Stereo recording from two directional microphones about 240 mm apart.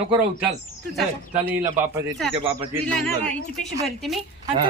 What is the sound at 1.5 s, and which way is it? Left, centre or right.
Speech, centre.